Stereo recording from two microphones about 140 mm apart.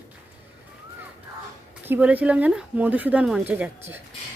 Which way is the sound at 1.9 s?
10° right (ahead or behind).